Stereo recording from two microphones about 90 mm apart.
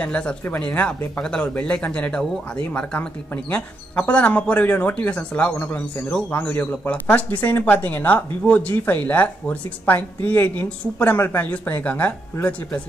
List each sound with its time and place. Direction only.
0.0 s speech: 10° left (ahead or behind)